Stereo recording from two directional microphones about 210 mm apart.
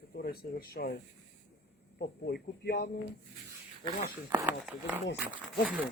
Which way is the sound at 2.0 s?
50° left (ahead or behind).